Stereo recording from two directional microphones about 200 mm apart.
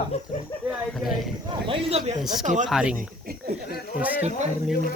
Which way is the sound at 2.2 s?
Centre (ahead or behind).